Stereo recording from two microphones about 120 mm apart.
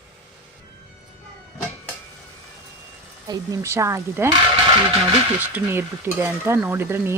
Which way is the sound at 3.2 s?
30° right (ahead or behind).